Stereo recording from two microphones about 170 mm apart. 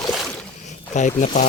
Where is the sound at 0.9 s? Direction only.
45° left (ahead or behind).